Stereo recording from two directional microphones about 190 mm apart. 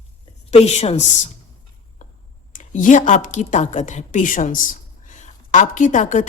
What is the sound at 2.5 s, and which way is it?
A woman's voice, 45° left (ahead or behind).